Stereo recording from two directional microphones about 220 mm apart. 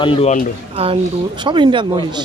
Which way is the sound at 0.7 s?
25° right (ahead or behind).